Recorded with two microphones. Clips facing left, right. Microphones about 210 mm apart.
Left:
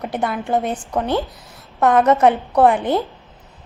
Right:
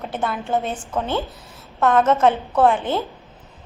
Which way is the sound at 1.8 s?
15° left (ahead or behind).